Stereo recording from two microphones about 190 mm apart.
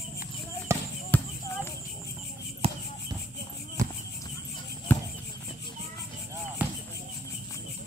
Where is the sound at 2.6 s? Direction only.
30° right (ahead or behind).